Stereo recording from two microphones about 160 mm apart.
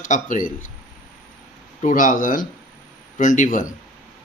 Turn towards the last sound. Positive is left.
turn(degrees=50)  # may be behind; listen again after turning